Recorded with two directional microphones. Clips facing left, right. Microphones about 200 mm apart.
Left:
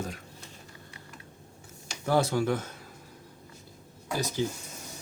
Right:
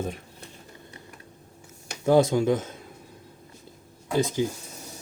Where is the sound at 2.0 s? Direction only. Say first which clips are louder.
Right 6 dB; 20° right (ahead or behind).